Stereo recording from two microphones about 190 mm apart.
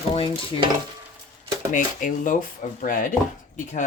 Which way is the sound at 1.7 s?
45° left (ahead or behind).